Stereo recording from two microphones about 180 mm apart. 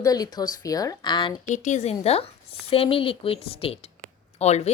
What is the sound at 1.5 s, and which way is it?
A woman's voice, 40° left (ahead or behind).